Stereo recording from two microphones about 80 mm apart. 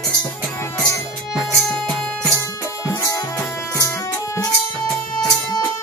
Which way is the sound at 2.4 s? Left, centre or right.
Left.